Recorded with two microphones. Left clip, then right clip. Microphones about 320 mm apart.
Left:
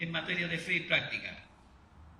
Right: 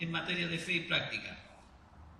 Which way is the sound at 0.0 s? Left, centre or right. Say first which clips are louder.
Left 1 dB; centre.